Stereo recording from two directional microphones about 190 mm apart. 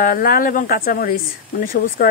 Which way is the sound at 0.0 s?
50° left (ahead or behind).